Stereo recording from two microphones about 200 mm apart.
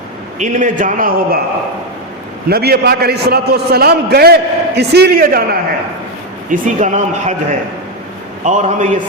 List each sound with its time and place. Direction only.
0.3 s a man's voice: 40° right (ahead or behind)
2.5 s a man's voice: 50° right (ahead or behind)
6.5 s a man's voice: 35° right (ahead or behind)
8.4 s a man's voice: 35° right (ahead or behind)